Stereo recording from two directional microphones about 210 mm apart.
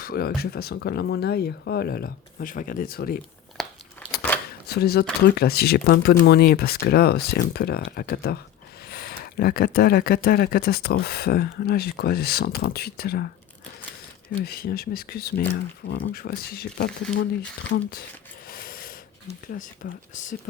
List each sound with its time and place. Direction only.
0.0 s speech: 45° left (ahead or behind)
3.6 s a sound: centre (ahead or behind)
4.7 s speech: 50° left (ahead or behind)
14.3 s speech: 45° left (ahead or behind)
18.4 s coin: 45° left (ahead or behind)
19.3 s speech: 40° left (ahead or behind)